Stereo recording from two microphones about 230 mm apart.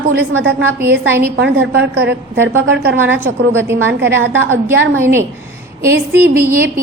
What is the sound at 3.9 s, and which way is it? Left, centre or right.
A woman's voice, right.